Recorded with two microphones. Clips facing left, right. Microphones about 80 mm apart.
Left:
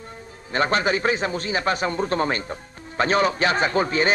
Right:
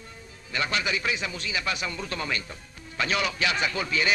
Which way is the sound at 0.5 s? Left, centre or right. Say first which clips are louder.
Left 8 dB; left.